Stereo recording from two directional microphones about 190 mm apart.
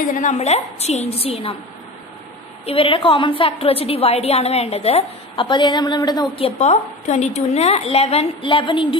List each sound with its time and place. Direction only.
0.1 s a woman's voice: 40° left (ahead or behind)
2.6 s a woman's voice: 30° left (ahead or behind)